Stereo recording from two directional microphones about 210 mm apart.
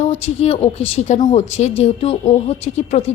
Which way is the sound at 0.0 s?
30° left (ahead or behind).